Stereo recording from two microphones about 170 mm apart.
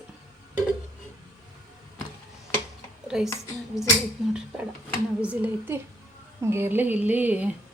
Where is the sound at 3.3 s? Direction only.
15° left (ahead or behind).